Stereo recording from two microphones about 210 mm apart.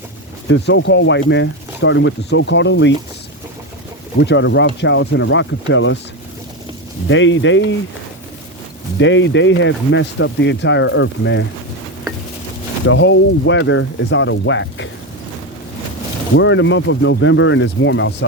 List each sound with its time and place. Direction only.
0.4 s speech: 60° left (ahead or behind)
4.2 s speech: 55° left (ahead or behind)
7.1 s speech: 60° left (ahead or behind)
9.0 s speech: 60° left (ahead or behind)
12.8 s speech: 65° left (ahead or behind)
16.3 s speech: 60° left (ahead or behind)